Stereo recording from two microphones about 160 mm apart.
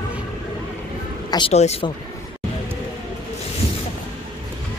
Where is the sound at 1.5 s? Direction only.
40° left (ahead or behind).